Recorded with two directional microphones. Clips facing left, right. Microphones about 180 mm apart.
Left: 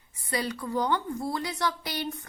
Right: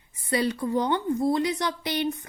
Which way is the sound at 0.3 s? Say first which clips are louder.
Right 6 dB; 25° right (ahead or behind).